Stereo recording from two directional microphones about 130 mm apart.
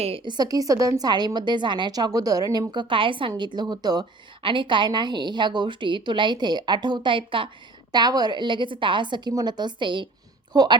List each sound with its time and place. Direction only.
0.3 s a woman's voice: 30° right (ahead or behind)